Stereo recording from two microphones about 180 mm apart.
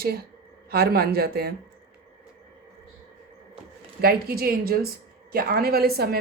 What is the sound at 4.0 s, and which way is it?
Speech, 60° right (ahead or behind).